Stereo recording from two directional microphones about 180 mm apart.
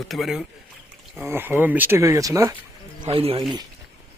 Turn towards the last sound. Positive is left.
turn(degrees=-30)  # may be behind; listen again after turning